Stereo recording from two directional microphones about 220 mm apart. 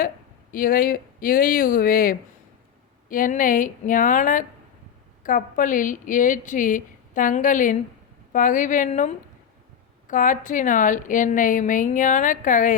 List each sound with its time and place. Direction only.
0.5 s a woman's voice: 40° left (ahead or behind)